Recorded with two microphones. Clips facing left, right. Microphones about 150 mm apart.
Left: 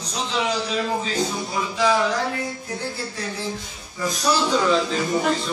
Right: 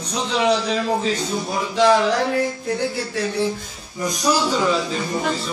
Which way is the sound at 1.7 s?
70° right (ahead or behind).